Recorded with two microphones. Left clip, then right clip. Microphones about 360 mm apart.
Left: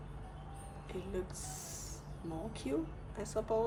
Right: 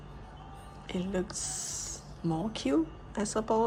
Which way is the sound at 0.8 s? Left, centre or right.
Right.